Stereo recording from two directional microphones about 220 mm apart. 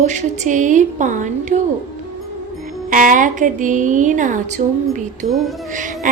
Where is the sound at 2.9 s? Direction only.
35° right (ahead or behind).